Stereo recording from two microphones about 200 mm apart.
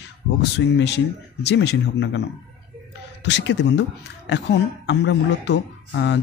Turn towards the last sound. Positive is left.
turn(degrees=60)  # may be behind; listen again after turning